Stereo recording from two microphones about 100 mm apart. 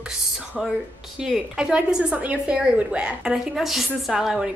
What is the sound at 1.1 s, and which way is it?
A woman's voice, 5° right (ahead or behind).